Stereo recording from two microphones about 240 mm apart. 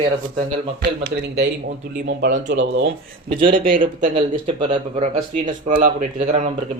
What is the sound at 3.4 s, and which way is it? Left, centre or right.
Speech, right.